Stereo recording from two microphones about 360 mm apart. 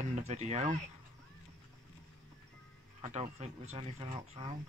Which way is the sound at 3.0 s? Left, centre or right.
Centre.